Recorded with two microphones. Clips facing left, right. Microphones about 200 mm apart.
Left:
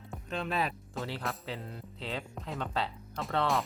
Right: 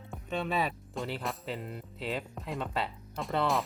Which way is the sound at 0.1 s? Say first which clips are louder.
Right 2 dB; centre (ahead or behind).